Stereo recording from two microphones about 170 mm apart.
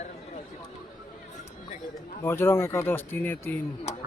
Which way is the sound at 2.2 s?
15° left (ahead or behind).